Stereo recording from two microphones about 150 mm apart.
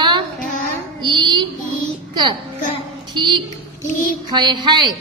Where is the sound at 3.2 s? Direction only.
30° right (ahead or behind).